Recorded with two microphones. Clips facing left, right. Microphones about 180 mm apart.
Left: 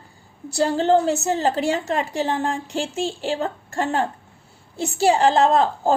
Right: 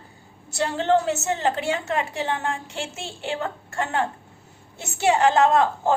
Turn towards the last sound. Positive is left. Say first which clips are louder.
# left 1 dB
turn(degrees=35)  # may be behind; listen again after turning